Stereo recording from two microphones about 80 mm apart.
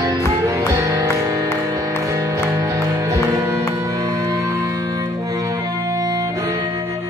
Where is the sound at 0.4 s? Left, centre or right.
Right.